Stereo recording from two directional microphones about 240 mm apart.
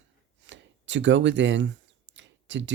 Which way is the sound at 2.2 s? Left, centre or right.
Right.